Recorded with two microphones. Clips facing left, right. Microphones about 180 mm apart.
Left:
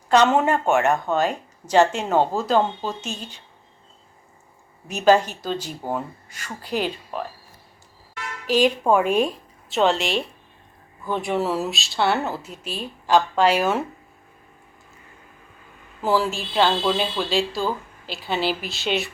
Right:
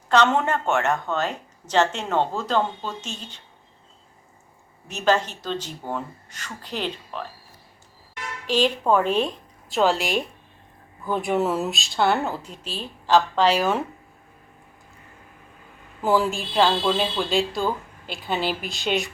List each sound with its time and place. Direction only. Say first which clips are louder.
0.1 s speech: left 2 dB; 10° left (ahead or behind)
4.9 s speech: left 5 dB; 10° left (ahead or behind)
8.4 s speech: left 2 dB; 10° left (ahead or behind)
16.0 s speech: even; centre (ahead or behind)
18.0 s a woman's voice: left 1 dB; 50° right (ahead or behind)
18.7 s speech: even; centre (ahead or behind)